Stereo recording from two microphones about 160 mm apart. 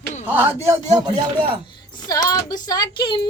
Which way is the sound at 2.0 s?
25° left (ahead or behind).